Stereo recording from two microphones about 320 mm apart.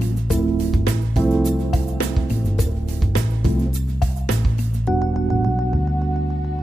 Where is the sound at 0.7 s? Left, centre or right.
Centre.